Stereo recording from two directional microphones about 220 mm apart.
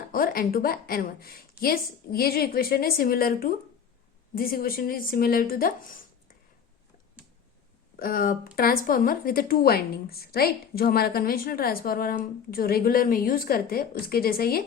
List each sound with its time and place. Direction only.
0.1 s a woman's voice: 40° left (ahead or behind)
7.9 s a woman's voice: 40° left (ahead or behind)